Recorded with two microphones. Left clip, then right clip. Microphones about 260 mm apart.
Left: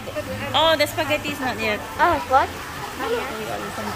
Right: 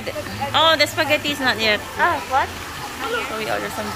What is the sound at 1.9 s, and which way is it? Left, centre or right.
Speech, left.